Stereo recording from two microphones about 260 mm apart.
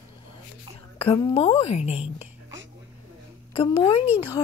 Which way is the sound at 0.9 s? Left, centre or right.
Left.